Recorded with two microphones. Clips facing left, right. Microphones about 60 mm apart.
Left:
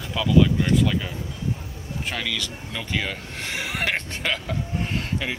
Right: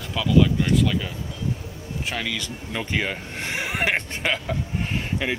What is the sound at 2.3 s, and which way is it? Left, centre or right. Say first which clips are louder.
Speech: right 1 dB; right.